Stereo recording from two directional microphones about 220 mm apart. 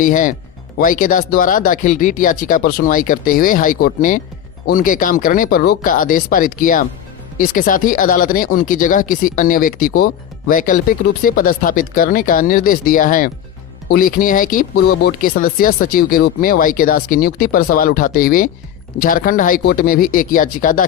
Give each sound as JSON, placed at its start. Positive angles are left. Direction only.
{"t": 0.0, "sound": "speech", "side_deg": 35}